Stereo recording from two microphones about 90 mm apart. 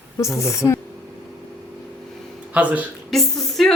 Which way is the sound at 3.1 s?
Centre (ahead or behind).